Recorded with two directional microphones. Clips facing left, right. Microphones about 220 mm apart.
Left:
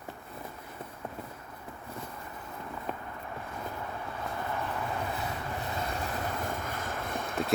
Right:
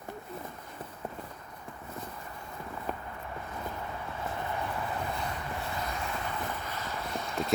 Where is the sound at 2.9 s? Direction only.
Centre (ahead or behind).